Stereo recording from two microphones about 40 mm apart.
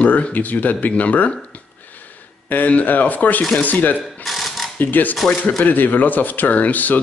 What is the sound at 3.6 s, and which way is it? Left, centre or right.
Speech, left.